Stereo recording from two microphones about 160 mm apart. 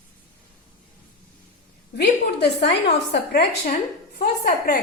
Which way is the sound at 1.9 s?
90° left.